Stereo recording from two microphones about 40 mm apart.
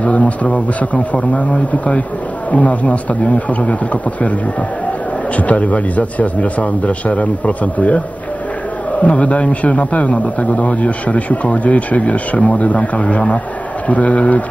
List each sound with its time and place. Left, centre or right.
0.0 s a man's voice: left
9.0 s a man's voice: left